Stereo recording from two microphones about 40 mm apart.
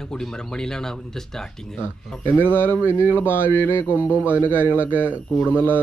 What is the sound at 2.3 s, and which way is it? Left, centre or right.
Speech, left.